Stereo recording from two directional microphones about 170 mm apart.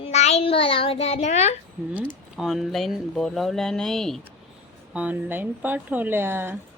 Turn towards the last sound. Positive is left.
turn(degrees=-10)  # may be behind; listen again after turning